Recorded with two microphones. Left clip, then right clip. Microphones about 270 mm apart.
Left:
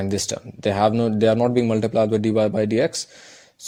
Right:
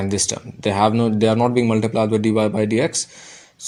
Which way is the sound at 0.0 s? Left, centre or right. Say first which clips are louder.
Right 2 dB; left.